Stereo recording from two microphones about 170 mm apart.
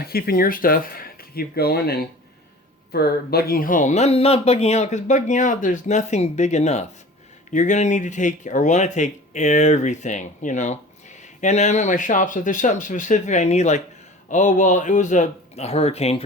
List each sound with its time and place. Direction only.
0.0 s speech: 60° left (ahead or behind); by 16.2 s 40° left (ahead or behind)